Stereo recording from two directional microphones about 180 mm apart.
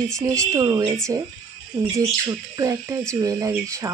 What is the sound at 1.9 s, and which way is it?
Speech, 20° right (ahead or behind).